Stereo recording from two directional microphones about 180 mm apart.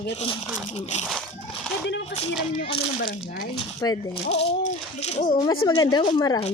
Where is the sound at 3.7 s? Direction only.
15° left (ahead or behind).